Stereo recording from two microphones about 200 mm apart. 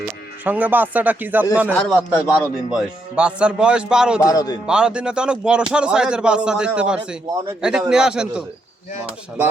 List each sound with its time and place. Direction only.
0.4 s speech: 10° right (ahead or behind)
1.7 s a man's voice: 5° left (ahead or behind)
2.0 s a man's voice: 5° right (ahead or behind)
4.2 s speech: 20° left (ahead or behind)
4.6 s a man's voice: 5° right (ahead or behind)